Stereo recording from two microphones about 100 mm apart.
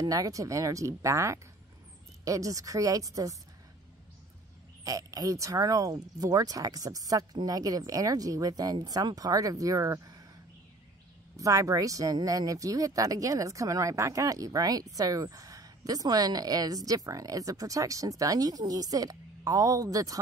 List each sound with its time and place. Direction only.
0.0 s speech: 35° right (ahead or behind)
4.8 s speech: 35° right (ahead or behind)
11.3 s speech: 35° right (ahead or behind)